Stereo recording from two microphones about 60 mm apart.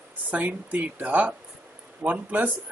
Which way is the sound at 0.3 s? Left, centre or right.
Right.